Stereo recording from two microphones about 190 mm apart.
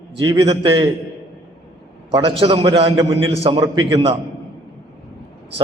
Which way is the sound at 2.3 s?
30° right (ahead or behind).